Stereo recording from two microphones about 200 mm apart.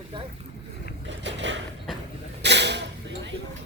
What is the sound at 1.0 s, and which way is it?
Vehicle, 65° right (ahead or behind).